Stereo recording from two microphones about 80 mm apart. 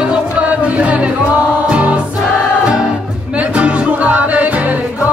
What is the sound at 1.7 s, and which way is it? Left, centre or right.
Choir, centre.